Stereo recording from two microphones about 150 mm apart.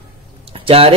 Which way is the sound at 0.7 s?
40° right (ahead or behind).